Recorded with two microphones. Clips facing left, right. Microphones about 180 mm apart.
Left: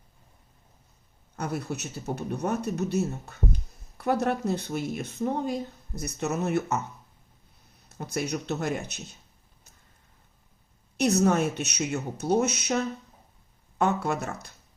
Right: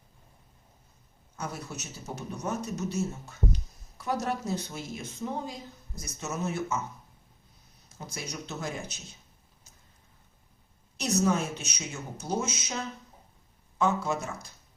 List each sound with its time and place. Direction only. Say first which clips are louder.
1.4 s speech: left 6 dB; 60° left (ahead or behind)
7.9 s speech: left 10 dB; 60° left (ahead or behind)
10.9 s speech: left 4 dB; 60° left (ahead or behind)